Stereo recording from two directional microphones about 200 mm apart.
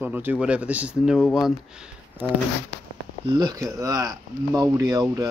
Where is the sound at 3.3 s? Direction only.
20° right (ahead or behind).